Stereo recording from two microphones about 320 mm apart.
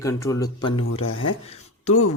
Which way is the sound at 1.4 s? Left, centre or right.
Centre.